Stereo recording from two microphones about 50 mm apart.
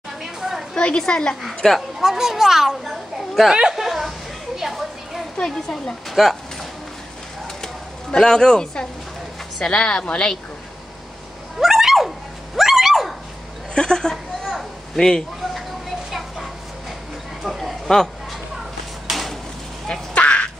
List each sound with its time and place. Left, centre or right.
0.2 s a sound: centre
0.7 s speech: centre
1.8 s a child's voice: centre
3.5 s a sound: centre
4.6 s children playing: centre
5.4 s speech: centre
7.6 s a sound: centre
9.6 s speech: left
11.6 s fowl: centre
12.5 s dog: centre
13.7 s speech: centre
16.1 s a sound: centre
20.2 s duck: left